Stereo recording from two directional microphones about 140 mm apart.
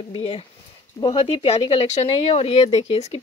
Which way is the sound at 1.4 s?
50° left (ahead or behind).